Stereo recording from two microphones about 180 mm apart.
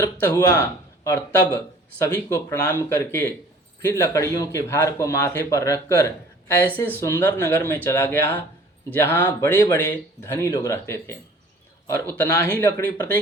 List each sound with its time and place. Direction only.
0.0 s speech: 15° left (ahead or behind)